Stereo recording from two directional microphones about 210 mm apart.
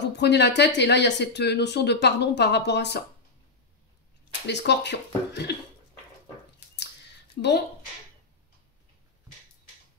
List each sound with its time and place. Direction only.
0.0 s speech: 55° left (ahead or behind)
4.3 s speech: 55° left (ahead or behind)
7.4 s speech: 50° left (ahead or behind)